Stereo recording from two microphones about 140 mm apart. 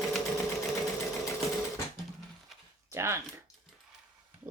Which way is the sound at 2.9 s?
20° right (ahead or behind).